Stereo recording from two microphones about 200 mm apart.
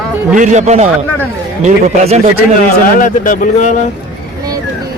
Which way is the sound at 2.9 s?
40° left (ahead or behind).